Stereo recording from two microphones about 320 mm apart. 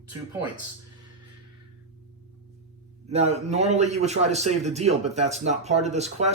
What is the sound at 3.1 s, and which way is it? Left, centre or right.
A man's voice, right.